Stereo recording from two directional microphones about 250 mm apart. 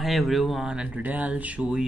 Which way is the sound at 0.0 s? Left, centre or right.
Centre.